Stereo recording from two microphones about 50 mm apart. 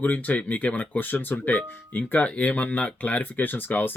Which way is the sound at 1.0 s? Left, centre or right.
Left.